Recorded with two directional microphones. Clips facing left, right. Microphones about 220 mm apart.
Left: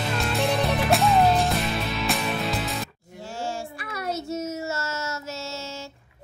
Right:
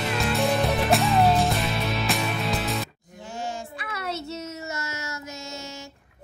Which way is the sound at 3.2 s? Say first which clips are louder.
Left 2 dB; 15° right (ahead or behind).